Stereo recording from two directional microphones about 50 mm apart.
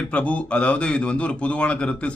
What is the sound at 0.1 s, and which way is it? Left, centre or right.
A man's voice, left.